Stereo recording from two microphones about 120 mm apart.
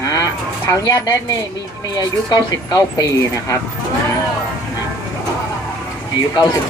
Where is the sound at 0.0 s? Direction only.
30° left (ahead or behind).